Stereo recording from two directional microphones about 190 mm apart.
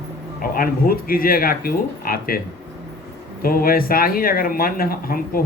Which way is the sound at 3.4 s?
50° left (ahead or behind).